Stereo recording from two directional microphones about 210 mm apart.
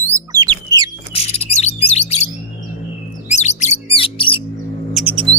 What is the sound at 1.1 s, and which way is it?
Bird, 30° left (ahead or behind).